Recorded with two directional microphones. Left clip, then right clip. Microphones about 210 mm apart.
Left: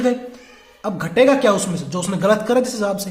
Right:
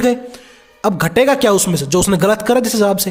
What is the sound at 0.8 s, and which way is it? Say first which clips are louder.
A man's voice: right 3 dB; 55° right (ahead or behind).